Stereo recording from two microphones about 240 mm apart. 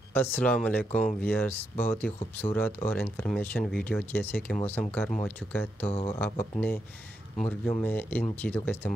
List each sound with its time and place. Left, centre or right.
0.1 s speech: centre
5.9 s speech: left
6.1 s speech: centre